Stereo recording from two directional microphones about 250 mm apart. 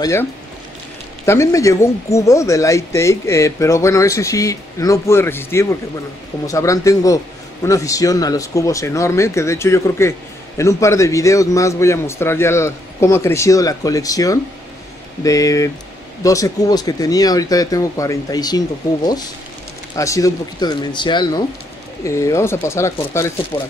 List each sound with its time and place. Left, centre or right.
0.0 s speech: centre
20.0 s speech: centre